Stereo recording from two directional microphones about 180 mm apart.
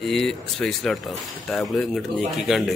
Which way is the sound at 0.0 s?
Centre (ahead or behind).